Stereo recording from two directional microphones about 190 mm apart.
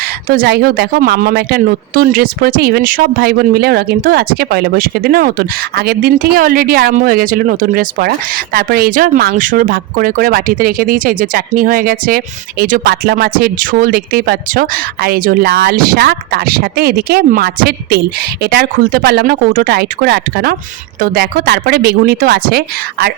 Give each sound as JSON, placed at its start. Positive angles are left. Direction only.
{"t": 0.3, "sound": "speech", "side_deg": -55}